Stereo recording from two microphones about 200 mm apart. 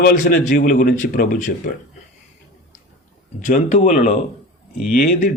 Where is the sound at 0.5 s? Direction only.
40° left (ahead or behind).